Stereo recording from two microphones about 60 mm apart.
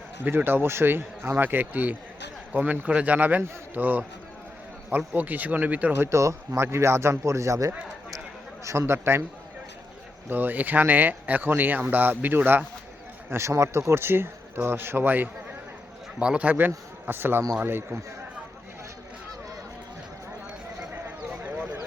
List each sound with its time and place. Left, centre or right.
0.3 s speech: right
6.0 s speech: right
8.9 s speech: right
10.2 s speech: right
13.3 s speech: right
13.9 s speech: right
16.1 s a man's voice: centre; by 18.0 s right
21.4 s a sound: right